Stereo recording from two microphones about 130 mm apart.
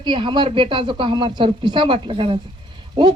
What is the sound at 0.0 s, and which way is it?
Speech, 40° right (ahead or behind).